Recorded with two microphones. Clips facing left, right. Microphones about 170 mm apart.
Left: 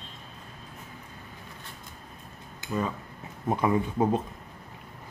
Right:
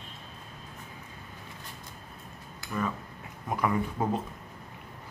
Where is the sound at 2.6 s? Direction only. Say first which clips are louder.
Left 2 dB; 20° left (ahead or behind).